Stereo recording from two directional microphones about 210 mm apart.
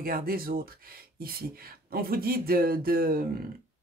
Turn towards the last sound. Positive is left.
turn(degrees=-45)  # may be behind; listen again after turning